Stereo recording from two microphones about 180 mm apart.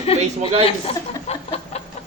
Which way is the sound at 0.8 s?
35° left (ahead or behind).